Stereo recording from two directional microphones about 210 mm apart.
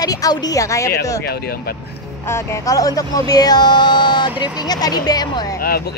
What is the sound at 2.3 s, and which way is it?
A woman's voice, 15° left (ahead or behind).